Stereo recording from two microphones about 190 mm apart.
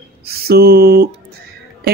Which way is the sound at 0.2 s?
55° right (ahead or behind).